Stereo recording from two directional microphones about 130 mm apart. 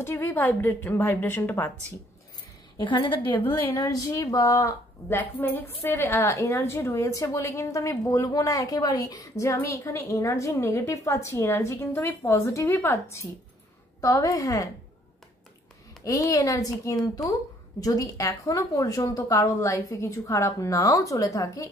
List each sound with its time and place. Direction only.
0.0 s a woman's voice: 15° left (ahead or behind)
2.8 s a woman's voice: 40° left (ahead or behind)
3.4 s a woman's voice: 20° left (ahead or behind)
16.0 s a woman's voice: 25° left (ahead or behind)